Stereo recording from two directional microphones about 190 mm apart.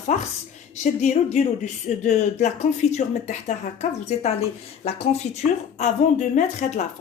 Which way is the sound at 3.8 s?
40° left (ahead or behind).